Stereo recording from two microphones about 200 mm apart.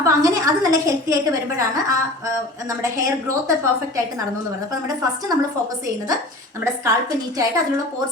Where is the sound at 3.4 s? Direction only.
15° right (ahead or behind).